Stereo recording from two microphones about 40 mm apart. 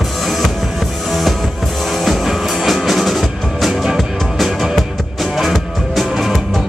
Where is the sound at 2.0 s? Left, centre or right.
Centre.